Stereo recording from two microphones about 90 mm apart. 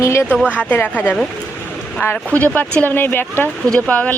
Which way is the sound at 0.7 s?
20° left (ahead or behind).